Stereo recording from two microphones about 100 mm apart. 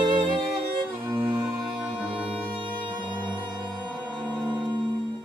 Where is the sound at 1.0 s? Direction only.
35° right (ahead or behind).